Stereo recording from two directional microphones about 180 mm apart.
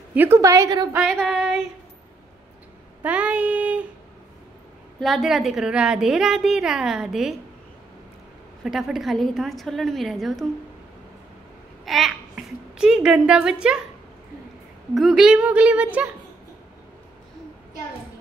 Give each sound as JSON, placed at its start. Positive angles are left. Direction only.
{"t": 0.1, "sound": "a woman's voice", "side_deg": -10}
{"t": 0.9, "sound": "a woman's voice", "side_deg": 0}
{"t": 3.0, "sound": "child singing", "side_deg": -5}
{"t": 5.0, "sound": "a woman's voice", "side_deg": 0}
{"t": 8.6, "sound": "a woman's voice", "side_deg": 0}
{"t": 11.8, "sound": "a child's voice", "side_deg": 0}
{"t": 15.0, "sound": "a woman's voice", "side_deg": 0}